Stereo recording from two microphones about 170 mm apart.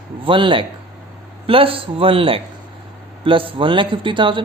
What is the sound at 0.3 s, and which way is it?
Speech, 30° right (ahead or behind).